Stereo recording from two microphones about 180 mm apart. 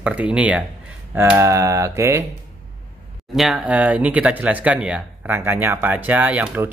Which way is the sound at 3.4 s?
5° right (ahead or behind).